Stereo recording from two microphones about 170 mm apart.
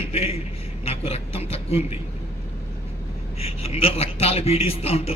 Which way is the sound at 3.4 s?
35° left (ahead or behind).